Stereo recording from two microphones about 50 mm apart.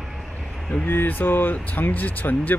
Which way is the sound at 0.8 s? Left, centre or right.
Left.